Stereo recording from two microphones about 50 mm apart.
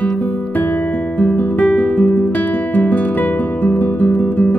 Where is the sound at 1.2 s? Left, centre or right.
Left.